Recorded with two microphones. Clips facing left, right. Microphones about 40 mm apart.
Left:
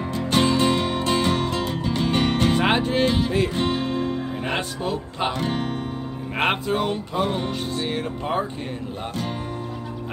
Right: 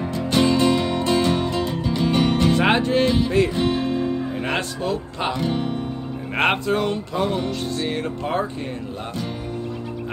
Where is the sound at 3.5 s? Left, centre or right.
Left.